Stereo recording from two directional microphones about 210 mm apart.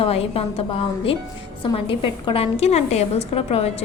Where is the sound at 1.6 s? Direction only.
25° left (ahead or behind).